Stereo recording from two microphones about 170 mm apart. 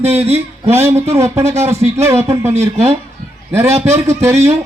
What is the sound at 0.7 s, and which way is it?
A man's voice, 15° right (ahead or behind).